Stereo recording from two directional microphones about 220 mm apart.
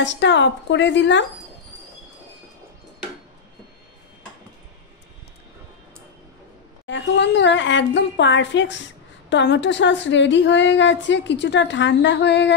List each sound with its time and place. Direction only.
0.0 s a woman's voice: 55° left (ahead or behind)
6.9 s a woman's voice: 50° left (ahead or behind)